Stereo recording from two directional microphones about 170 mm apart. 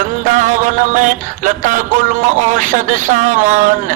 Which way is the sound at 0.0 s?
50° right (ahead or behind).